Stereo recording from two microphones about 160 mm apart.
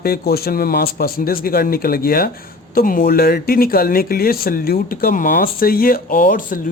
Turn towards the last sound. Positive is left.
turn(degrees=60)  # may be behind; listen again after turning